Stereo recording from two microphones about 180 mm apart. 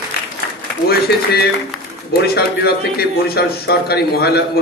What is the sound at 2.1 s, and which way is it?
A man's voice, 60° left (ahead or behind).